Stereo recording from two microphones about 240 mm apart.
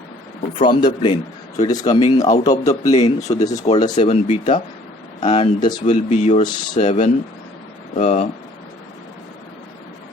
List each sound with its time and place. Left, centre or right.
0.6 s a man's voice: centre
3.9 s a man's voice: left
5.8 s a man's voice: left